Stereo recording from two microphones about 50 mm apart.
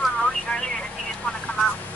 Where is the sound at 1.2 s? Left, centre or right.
Left.